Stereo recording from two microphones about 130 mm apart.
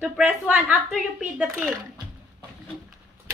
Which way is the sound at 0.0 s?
15° right (ahead or behind).